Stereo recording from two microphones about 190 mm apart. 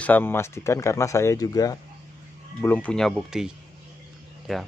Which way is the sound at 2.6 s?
10° left (ahead or behind).